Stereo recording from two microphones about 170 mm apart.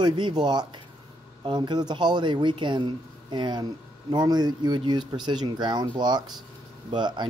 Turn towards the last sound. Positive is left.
turn(degrees=-25)  # may be behind; listen again after turning